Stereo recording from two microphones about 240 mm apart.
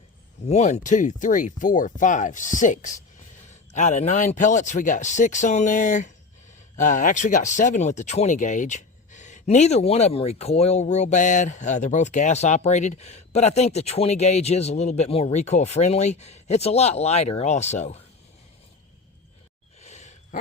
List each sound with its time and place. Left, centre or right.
0.4 s speech: left
19.8 s gasp: left